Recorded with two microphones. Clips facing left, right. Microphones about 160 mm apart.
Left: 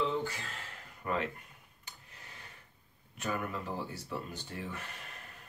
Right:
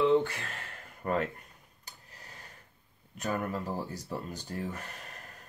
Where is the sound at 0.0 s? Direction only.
65° right (ahead or behind).